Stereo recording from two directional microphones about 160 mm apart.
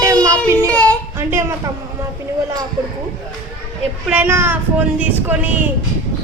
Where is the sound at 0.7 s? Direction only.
10° left (ahead or behind).